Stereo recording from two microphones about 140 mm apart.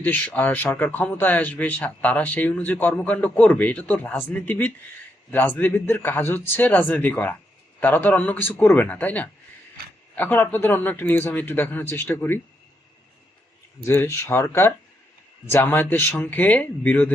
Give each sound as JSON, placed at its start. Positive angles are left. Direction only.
{"t": 0.0, "sound": "speech", "side_deg": 10}
{"t": 9.8, "sound": "a sound", "side_deg": -90}
{"t": 10.2, "sound": "speech", "side_deg": 15}
{"t": 13.8, "sound": "speech", "side_deg": 15}